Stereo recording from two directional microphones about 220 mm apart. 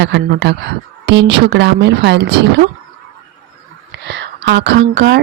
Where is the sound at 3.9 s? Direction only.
50° right (ahead or behind).